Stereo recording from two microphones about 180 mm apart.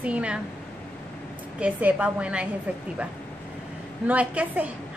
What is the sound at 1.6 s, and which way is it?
Speech, 10° right (ahead or behind).